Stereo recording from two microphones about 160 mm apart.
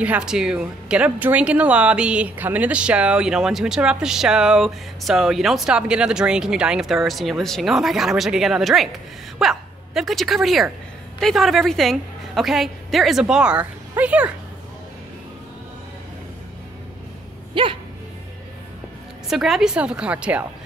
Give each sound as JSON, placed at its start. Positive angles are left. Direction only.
{"t": 0.0, "sound": "speech", "side_deg": -5}
{"t": 17.6, "sound": "music", "side_deg": -30}
{"t": 19.2, "sound": "speech", "side_deg": 0}